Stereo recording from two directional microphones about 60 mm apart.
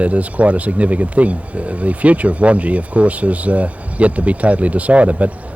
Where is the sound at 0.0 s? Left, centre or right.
Right.